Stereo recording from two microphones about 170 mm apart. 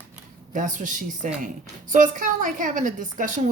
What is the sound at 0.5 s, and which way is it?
Speech, 50° right (ahead or behind).